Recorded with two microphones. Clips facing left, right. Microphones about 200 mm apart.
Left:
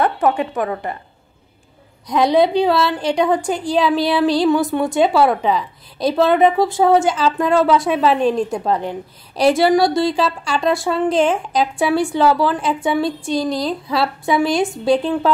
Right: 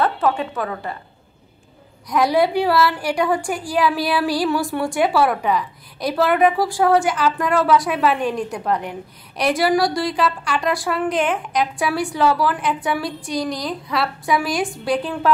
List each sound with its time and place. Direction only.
0.0 s a woman's voice: 15° left (ahead or behind)
2.0 s a woman's voice: 20° left (ahead or behind)